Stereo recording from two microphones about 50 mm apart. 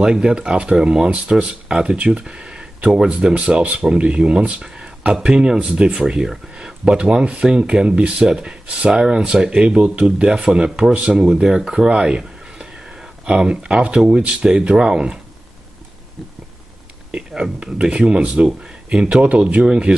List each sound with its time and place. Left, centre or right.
0.0 s speech: centre
4.6 s a sound: centre
5.1 s speech: centre
17.1 s speech: centre